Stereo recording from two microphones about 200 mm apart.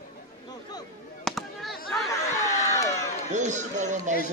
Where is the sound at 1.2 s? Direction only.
Centre (ahead or behind).